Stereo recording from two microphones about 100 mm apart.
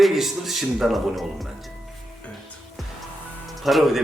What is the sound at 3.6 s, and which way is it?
Speech, centre (ahead or behind).